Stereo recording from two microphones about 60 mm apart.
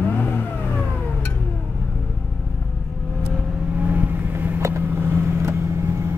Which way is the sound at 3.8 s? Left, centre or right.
Right.